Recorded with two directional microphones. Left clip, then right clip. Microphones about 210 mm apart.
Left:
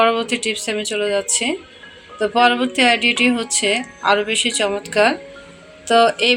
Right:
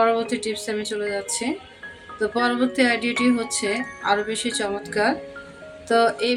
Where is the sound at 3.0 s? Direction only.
30° right (ahead or behind).